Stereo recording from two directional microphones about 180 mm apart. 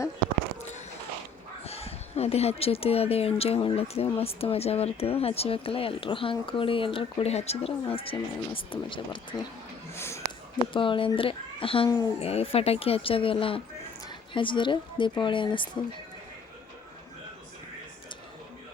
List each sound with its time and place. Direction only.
1.6 s speech: 35° left (ahead or behind)
9.9 s a sound: 15° left (ahead or behind)
10.7 s a woman's voice: 30° left (ahead or behind)